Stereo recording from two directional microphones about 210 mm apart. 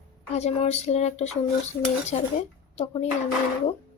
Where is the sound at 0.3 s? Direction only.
30° left (ahead or behind).